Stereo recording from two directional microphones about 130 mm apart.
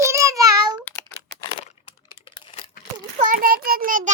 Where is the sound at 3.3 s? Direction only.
90° right.